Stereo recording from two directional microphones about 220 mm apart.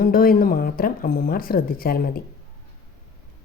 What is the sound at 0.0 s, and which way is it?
A woman's voice, 40° left (ahead or behind).